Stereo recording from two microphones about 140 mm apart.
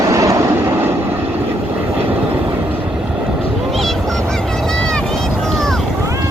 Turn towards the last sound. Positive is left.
turn(degrees=5)  # may be behind; listen again after turning